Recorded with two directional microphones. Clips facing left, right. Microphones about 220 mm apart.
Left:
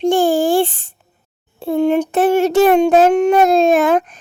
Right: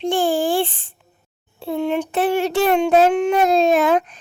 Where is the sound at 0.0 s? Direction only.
45° left (ahead or behind).